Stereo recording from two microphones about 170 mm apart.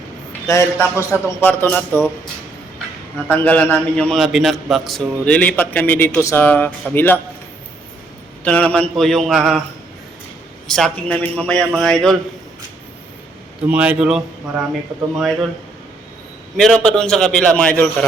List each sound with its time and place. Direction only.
0.4 s a man's voice: 15° left (ahead or behind)
3.2 s a man's voice: 10° left (ahead or behind)
8.4 s a man's voice: 5° left (ahead or behind)
10.7 s a man's voice: 5° left (ahead or behind)
13.7 s a man's voice: 5° right (ahead or behind)
16.6 s a man's voice: 5° left (ahead or behind)